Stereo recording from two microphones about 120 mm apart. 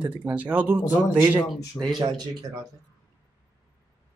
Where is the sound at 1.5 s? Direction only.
Centre (ahead or behind).